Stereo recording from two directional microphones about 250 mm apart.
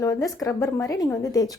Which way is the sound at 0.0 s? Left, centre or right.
Centre.